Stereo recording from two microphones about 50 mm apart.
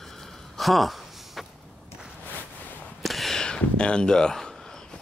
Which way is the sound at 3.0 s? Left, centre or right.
Centre.